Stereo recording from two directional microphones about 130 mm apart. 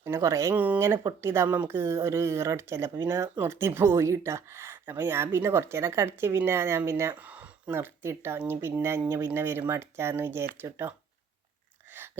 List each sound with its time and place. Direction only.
0.0 s speech: 20° right (ahead or behind)
0.5 s speech: 10° right (ahead or behind)